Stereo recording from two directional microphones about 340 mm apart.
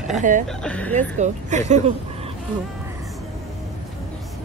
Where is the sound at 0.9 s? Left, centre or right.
Right.